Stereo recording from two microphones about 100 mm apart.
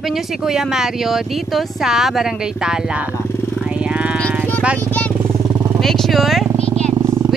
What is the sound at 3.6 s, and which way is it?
Vehicle, 10° right (ahead or behind).